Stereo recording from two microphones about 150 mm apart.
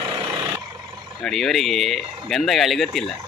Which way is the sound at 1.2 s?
Centre (ahead or behind).